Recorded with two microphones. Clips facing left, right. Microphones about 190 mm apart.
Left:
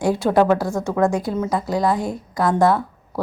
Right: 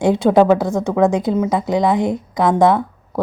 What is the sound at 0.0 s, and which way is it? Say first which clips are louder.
A woman's voice: right 4 dB; 20° right (ahead or behind).